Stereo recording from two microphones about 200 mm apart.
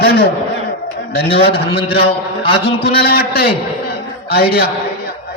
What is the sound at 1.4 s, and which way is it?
Speech, 30° left (ahead or behind).